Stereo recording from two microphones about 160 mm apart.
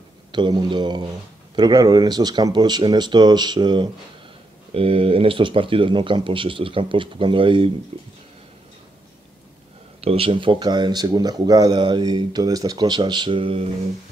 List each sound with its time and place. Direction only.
0.3 s speech: 25° right (ahead or behind)
9.9 s speech: 35° right (ahead or behind)